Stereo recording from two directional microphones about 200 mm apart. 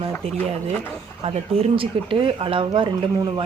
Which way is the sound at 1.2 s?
25° right (ahead or behind).